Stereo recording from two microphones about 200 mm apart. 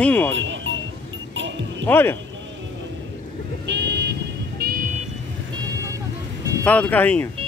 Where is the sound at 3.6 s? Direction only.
60° right (ahead or behind).